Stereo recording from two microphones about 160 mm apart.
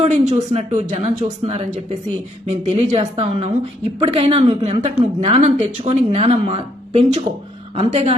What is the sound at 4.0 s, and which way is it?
Speech, 35° right (ahead or behind).